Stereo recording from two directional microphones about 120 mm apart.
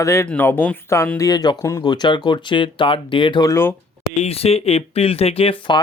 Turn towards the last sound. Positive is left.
turn(degrees=40)  # may be behind; listen again after turning